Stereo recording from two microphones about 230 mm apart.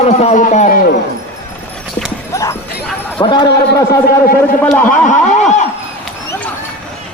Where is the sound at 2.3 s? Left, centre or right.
Centre.